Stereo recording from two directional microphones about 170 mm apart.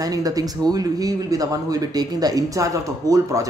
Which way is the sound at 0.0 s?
20° right (ahead or behind).